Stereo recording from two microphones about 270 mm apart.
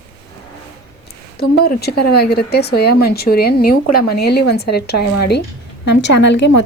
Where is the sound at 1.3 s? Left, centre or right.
Left.